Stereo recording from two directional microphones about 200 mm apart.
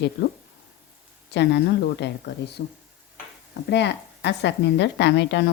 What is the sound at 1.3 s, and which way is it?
A woman's voice, 60° left (ahead or behind).